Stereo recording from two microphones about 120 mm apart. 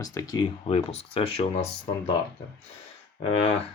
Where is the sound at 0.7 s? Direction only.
55° left (ahead or behind).